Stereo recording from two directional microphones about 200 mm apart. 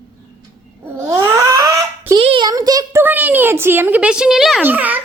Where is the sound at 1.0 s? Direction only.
15° right (ahead or behind).